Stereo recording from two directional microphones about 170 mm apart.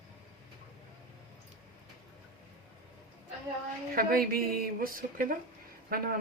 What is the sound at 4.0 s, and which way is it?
Speech, 60° right (ahead or behind).